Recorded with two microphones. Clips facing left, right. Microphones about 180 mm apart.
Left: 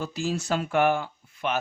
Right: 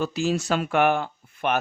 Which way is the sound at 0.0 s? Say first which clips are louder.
Right 5 dB; 80° right.